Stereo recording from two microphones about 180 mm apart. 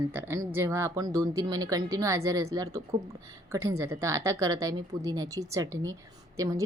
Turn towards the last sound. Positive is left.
turn(degrees=-20)  # may be behind; listen again after turning